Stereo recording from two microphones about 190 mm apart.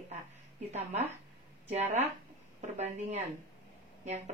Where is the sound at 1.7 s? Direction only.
35° right (ahead or behind).